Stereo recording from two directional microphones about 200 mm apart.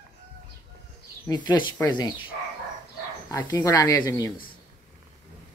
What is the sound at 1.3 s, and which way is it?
Speech, 20° left (ahead or behind).